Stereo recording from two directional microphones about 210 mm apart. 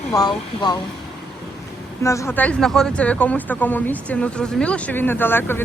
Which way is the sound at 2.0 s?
10° left (ahead or behind).